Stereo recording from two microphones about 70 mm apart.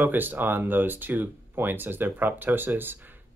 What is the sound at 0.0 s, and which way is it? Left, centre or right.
Speech, right.